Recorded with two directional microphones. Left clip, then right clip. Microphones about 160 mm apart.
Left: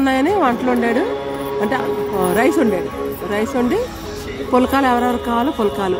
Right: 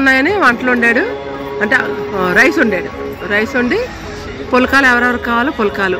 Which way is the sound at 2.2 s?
15° left (ahead or behind).